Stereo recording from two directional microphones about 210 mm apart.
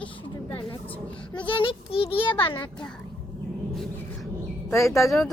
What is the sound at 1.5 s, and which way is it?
A child's voice, 25° left (ahead or behind).